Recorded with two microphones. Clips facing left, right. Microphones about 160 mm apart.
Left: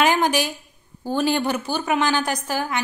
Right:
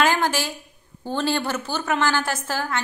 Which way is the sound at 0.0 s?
15° left (ahead or behind).